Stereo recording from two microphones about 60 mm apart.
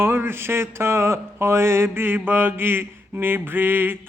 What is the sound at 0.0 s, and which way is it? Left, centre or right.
Mantra, right.